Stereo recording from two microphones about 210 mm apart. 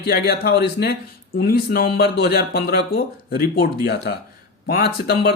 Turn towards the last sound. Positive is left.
turn(degrees=50)  # may be behind; listen again after turning